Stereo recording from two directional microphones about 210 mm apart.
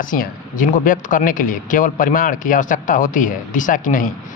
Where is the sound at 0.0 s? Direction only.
40° left (ahead or behind).